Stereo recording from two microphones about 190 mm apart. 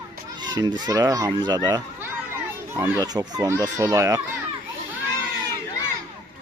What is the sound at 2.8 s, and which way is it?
Speech, 20° right (ahead or behind).